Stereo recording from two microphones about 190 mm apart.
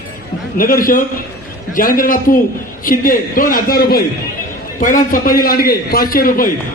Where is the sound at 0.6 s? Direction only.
45° left (ahead or behind).